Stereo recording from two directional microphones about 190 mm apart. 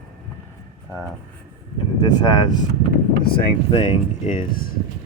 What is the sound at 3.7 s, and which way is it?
Speech, 35° left (ahead or behind).